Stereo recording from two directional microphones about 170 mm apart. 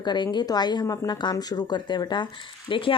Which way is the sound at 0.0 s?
25° left (ahead or behind).